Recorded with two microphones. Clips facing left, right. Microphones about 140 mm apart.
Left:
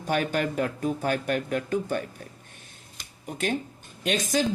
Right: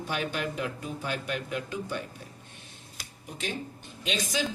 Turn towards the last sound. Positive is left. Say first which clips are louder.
# left 5 dB
turn(degrees=50)  # may be behind; listen again after turning